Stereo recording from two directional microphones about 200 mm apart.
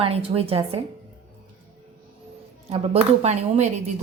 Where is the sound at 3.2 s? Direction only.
35° right (ahead or behind).